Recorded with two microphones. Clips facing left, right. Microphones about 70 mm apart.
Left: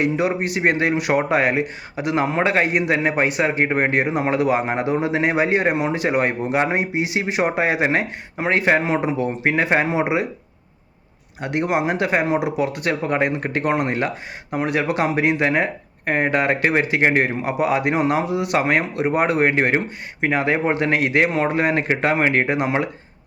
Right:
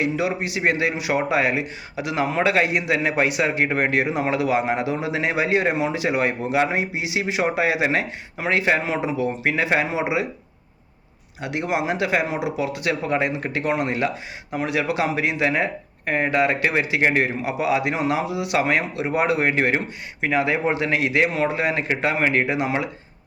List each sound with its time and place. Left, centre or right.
0.0 s speech: left
11.3 s speech: left